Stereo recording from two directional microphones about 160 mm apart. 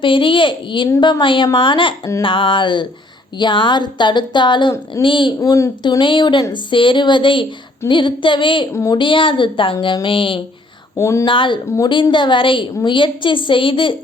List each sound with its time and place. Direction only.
0.0 s a woman's voice: 30° left (ahead or behind)
5.4 s a woman's voice: 20° left (ahead or behind)
8.7 s a woman's voice: 20° left (ahead or behind)
9.0 s a woman's voice: 30° left (ahead or behind)
10.9 s speech: 20° left (ahead or behind)
11.3 s a woman's voice: 30° left (ahead or behind)